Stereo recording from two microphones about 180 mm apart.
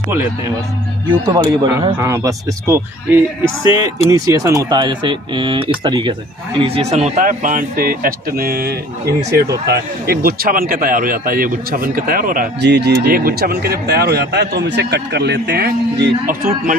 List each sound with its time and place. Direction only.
1.3 s a man's voice: 20° right (ahead or behind); by 12.6 s 50° right (ahead or behind)
12.6 s speech: 70° right (ahead or behind); by 16.7 s 50° right (ahead or behind)